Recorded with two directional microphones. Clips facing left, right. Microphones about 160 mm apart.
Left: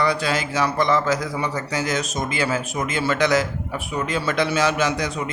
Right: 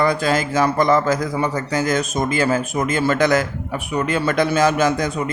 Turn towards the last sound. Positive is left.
turn(degrees=-50)  # may be behind; listen again after turning